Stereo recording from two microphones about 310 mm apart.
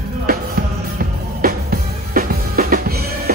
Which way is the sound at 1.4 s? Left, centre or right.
Right.